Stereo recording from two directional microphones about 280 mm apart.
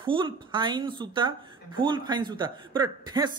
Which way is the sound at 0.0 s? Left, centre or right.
Centre.